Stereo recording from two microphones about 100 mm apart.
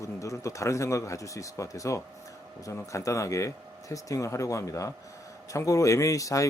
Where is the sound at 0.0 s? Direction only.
30° left (ahead or behind).